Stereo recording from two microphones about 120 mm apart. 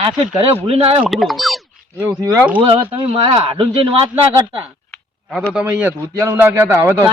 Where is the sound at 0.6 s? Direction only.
55° right (ahead or behind).